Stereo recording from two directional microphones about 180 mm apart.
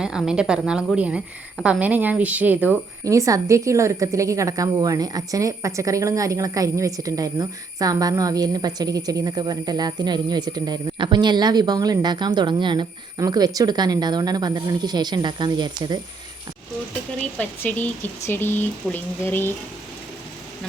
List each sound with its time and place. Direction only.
0.0 s a woman's voice: 5° right (ahead or behind); by 16.0 s 25° right (ahead or behind)
17.3 s speech: 5° left (ahead or behind)